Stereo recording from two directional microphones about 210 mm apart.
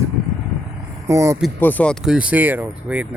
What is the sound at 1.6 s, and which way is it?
Speech, 10° left (ahead or behind).